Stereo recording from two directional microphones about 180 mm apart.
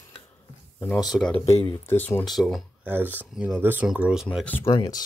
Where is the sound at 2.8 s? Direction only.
10° right (ahead or behind).